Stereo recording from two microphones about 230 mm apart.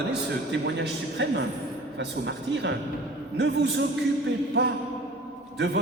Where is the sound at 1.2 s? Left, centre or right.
Right.